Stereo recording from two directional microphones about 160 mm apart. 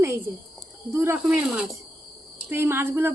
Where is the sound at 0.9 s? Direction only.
15° right (ahead or behind).